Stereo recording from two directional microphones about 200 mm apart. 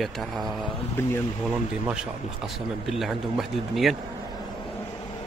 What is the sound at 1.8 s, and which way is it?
Speech, 5° right (ahead or behind).